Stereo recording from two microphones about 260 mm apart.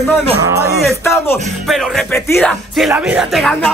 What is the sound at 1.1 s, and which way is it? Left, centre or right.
Music, centre.